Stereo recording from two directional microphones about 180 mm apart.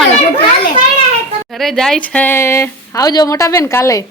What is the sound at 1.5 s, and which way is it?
Speech, centre (ahead or behind).